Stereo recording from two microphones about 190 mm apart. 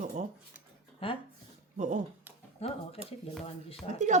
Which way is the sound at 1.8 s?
40° right (ahead or behind).